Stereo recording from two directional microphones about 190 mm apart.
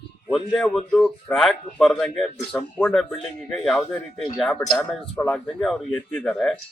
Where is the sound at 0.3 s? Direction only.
Centre (ahead or behind).